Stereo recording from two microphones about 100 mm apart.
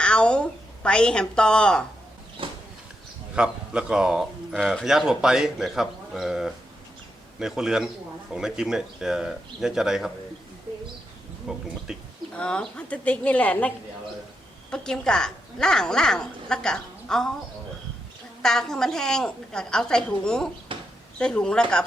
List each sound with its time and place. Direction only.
0.0 s a woman's voice: 10° left (ahead or behind)
2.4 s a sound: 60° right (ahead or behind)
3.3 s a man's voice: 10° right (ahead or behind)
11.5 s a man's voice: 5° right (ahead or behind)
12.3 s speech: 10° left (ahead or behind)
18.4 s a man's voice: 5° left (ahead or behind)
20.7 s a sound: 60° right (ahead or behind)
21.2 s speech: 10° left (ahead or behind)